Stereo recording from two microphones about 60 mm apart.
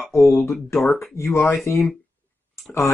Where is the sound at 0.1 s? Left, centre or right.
Left.